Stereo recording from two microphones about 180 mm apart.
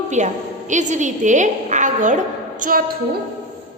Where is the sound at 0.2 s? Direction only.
45° right (ahead or behind).